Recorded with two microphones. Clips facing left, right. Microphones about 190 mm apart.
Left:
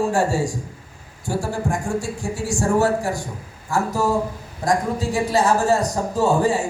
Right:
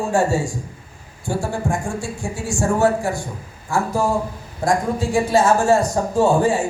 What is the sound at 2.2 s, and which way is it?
Speech, 35° left (ahead or behind).